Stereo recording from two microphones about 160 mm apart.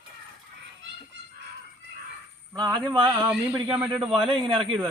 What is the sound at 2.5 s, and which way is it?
Speech, 25° right (ahead or behind).